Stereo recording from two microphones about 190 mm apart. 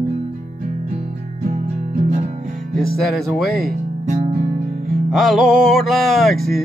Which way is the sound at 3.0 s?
Centre (ahead or behind).